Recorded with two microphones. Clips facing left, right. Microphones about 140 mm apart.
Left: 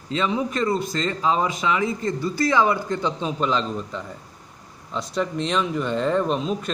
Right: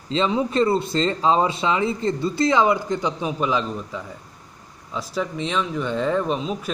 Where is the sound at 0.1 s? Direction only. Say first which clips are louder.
Right 3 dB; 25° right (ahead or behind).